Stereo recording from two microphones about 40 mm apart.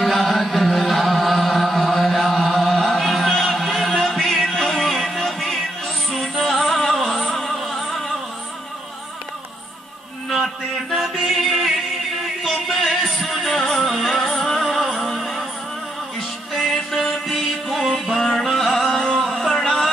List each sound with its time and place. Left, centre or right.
0.0 s chant: centre
3.3 s music: centre
11.0 s music: centre
11.3 s music: centre
16.7 s music: centre
19.1 s a sound: centre